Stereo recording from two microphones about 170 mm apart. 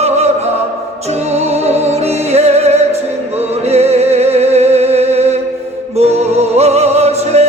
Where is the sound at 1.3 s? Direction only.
40° right (ahead or behind).